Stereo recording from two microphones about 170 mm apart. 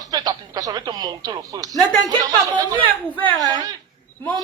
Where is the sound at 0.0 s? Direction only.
20° right (ahead or behind).